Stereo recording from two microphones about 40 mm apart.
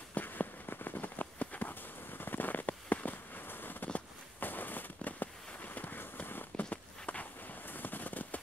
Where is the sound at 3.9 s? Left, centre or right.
Left.